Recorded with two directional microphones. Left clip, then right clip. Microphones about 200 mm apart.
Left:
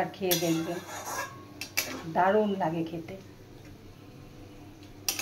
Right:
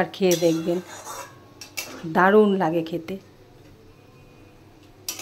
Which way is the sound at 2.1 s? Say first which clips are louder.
Right 8 dB; 65° right (ahead or behind).